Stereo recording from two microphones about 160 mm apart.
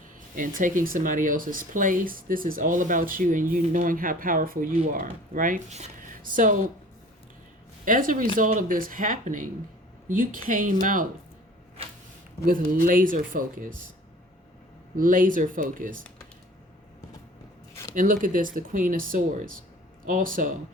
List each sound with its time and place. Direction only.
0.3 s speech: 55° right (ahead or behind)
7.9 s speech: 55° right (ahead or behind)
12.5 s speech: 60° right (ahead or behind)
14.9 s speech: 55° right (ahead or behind)
17.9 s speech: 55° right (ahead or behind)